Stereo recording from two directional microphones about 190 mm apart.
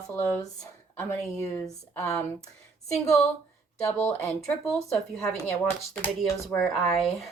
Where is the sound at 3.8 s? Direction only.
15° left (ahead or behind).